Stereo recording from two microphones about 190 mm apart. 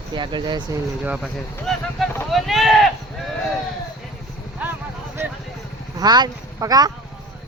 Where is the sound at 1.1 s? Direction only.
Centre (ahead or behind).